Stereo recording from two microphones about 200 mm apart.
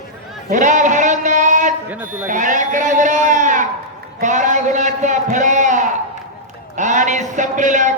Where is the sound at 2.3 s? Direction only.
40° right (ahead or behind).